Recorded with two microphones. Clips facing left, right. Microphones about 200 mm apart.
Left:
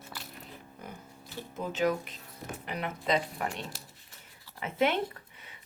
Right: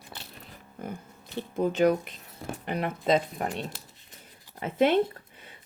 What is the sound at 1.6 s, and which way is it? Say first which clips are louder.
Speech: right 7 dB; 55° right (ahead or behind).